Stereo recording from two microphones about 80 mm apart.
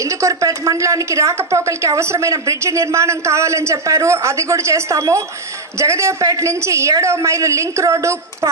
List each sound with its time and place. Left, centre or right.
0.0 s a woman's voice: right